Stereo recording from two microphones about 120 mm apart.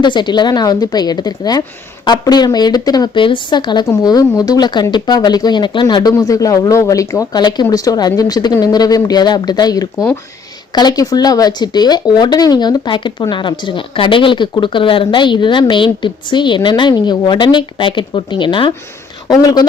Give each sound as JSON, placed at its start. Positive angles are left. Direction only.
{"t": 0.0, "sound": "speech", "side_deg": 40}